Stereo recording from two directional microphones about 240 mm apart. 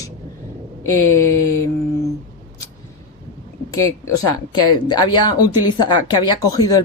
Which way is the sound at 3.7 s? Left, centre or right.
Centre.